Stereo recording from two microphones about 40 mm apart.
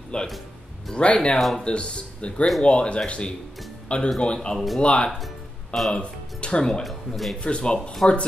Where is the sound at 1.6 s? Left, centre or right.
Left.